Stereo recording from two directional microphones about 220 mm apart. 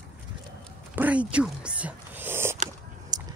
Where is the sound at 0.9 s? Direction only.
5° right (ahead or behind).